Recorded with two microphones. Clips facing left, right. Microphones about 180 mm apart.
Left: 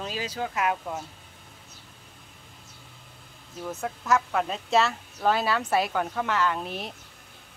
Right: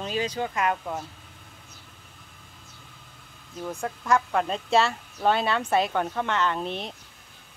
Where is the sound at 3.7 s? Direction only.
5° left (ahead or behind).